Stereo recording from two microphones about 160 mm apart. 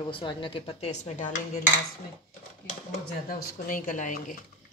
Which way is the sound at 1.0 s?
50° left (ahead or behind).